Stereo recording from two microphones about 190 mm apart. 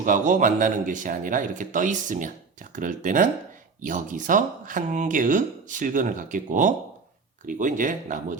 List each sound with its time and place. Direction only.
0.0 s speech: 40° right (ahead or behind)